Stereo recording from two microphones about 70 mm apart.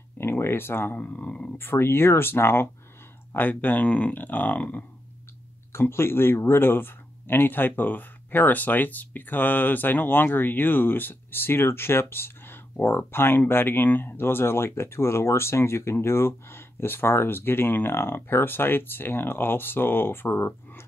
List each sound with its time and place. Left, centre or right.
0.2 s a sound: left
0.9 s speech: left
1.6 s speech: left
5.7 s speech: left